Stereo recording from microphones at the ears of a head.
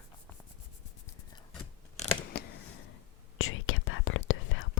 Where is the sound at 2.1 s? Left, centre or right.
Left.